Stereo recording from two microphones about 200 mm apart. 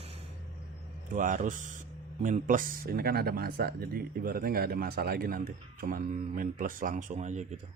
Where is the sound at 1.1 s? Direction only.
40° right (ahead or behind).